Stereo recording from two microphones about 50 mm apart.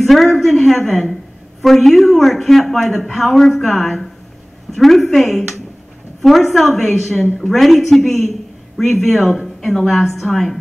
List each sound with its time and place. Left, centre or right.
0.0 s a woman's voice: centre